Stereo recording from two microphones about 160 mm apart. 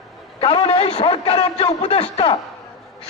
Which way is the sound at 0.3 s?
40° left (ahead or behind).